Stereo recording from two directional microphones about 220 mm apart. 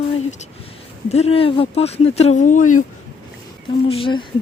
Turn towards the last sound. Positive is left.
turn(degrees=25)  # may be behind; listen again after turning